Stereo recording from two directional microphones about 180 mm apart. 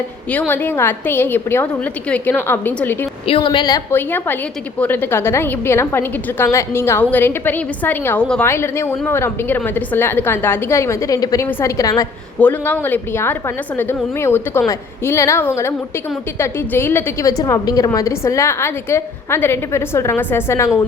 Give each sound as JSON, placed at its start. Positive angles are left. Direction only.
{"t": 0.3, "sound": "a woman's voice", "side_deg": 10}
{"t": 3.2, "sound": "a woman's voice", "side_deg": 30}
{"t": 3.9, "sound": "a woman's voice", "side_deg": 10}